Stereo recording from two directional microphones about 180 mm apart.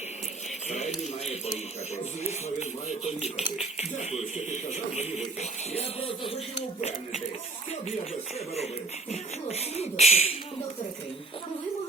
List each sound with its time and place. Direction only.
0.7 s a sound: 40° left (ahead or behind)
2.2 s speech: 40° left (ahead or behind)
8.5 s speech: 35° left (ahead or behind)